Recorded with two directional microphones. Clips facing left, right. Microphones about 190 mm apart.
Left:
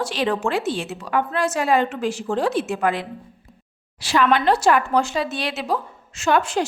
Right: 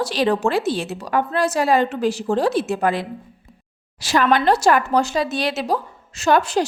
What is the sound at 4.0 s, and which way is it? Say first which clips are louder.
A woman's voice: right 1 dB; 40° right (ahead or behind).